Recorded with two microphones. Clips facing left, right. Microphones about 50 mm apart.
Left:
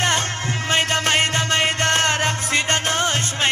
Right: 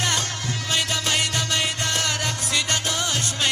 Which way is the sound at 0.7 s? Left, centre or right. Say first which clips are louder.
Left 5 dB; left.